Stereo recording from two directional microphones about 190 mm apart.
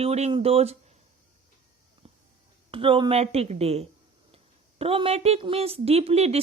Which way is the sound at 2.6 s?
30° right (ahead or behind).